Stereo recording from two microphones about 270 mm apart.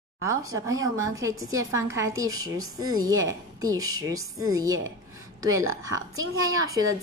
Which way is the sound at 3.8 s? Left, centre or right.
Right.